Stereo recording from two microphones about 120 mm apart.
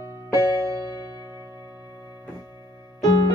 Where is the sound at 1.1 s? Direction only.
30° left (ahead or behind).